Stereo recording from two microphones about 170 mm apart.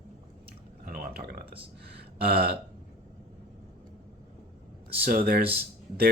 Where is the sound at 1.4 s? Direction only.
30° right (ahead or behind).